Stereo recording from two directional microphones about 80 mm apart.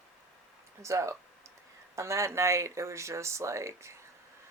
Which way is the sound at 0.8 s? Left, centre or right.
Right.